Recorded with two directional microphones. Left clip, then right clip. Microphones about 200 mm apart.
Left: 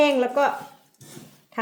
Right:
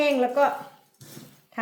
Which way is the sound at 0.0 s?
40° left (ahead or behind).